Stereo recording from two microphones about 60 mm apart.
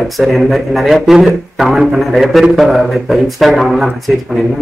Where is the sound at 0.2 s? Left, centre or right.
Centre.